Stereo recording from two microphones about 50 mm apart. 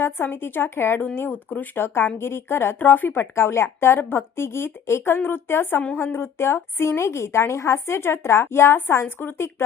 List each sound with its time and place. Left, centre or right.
0.0 s a woman's voice: left
1.8 s a woman's voice: left
2.7 s speech: left
3.3 s a woman's voice: left
9.0 s speech: left
9.6 s a woman's voice: left